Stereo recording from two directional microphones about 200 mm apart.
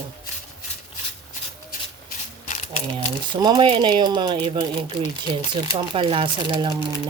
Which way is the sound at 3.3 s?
20° right (ahead or behind).